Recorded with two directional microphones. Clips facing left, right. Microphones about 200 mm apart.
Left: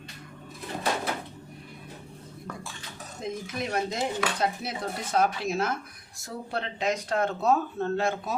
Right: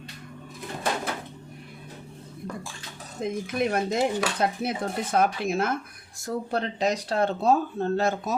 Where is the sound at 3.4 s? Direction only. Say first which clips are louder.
Right 5 dB; 55° right (ahead or behind).